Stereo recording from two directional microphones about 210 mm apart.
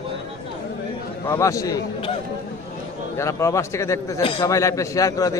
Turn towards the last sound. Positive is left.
turn(degrees=15)  # may be behind; listen again after turning